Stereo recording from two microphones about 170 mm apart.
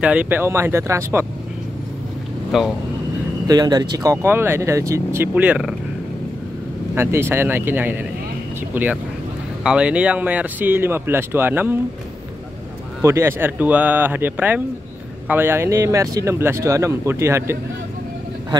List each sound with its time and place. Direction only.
0.0 s speech: 10° right (ahead or behind)
2.5 s speech: centre (ahead or behind)
3.4 s speech: 25° right (ahead or behind); by 5.8 s 5° right (ahead or behind)
7.0 s speech: 15° right (ahead or behind)
13.0 s speech: 15° right (ahead or behind)